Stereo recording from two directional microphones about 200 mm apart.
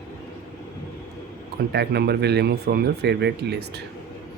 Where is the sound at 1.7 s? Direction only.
55° right (ahead or behind).